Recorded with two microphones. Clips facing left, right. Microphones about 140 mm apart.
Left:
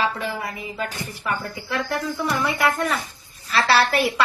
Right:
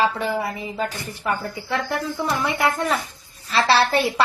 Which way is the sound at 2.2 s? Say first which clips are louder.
Even; 25° right (ahead or behind).